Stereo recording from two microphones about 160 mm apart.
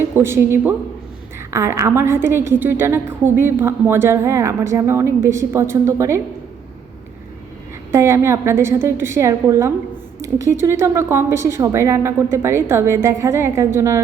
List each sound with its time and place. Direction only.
0.2 s a woman's voice: 15° right (ahead or behind)
7.9 s a woman's voice: 15° right (ahead or behind)
10.2 s a sound: 20° right (ahead or behind)
10.6 s a woman's voice: 15° right (ahead or behind)